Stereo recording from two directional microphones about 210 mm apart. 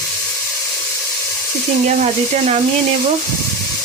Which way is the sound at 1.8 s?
30° right (ahead or behind).